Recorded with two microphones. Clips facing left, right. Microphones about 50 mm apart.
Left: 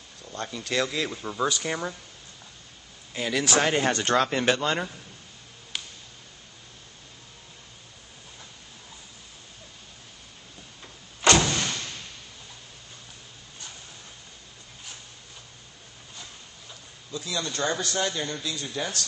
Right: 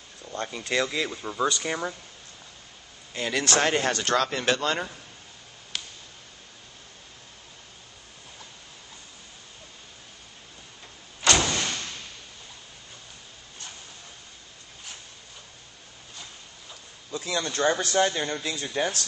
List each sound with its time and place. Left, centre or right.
0.3 s speech: centre
0.7 s speech: centre
3.1 s speech: centre
3.9 s speech: left
4.4 s speech: centre
5.7 s a sound: centre
17.1 s speech: right